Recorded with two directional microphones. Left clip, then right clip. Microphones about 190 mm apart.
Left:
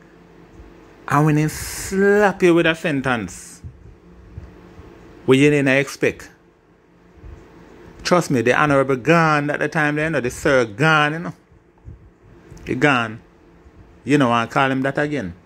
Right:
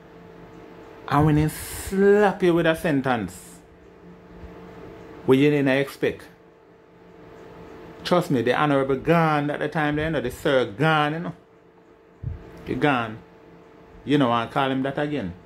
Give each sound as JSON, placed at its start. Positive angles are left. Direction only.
{"t": 1.0, "sound": "speech", "side_deg": 25}
{"t": 2.6, "sound": "speech", "side_deg": 15}
{"t": 5.2, "sound": "speech", "side_deg": 25}
{"t": 8.0, "sound": "speech", "side_deg": 25}
{"t": 12.6, "sound": "speech", "side_deg": 25}